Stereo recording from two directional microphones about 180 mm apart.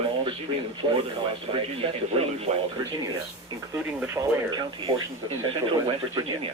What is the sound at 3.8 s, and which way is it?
Speech, 15° right (ahead or behind).